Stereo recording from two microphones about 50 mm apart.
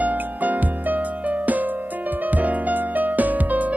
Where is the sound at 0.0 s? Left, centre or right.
Right.